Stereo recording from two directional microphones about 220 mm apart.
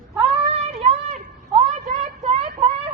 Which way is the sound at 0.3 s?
30° right (ahead or behind).